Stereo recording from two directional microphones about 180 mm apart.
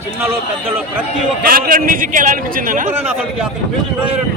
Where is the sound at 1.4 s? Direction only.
55° right (ahead or behind).